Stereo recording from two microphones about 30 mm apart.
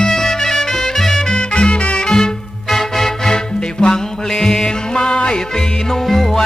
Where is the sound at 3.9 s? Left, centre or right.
Left.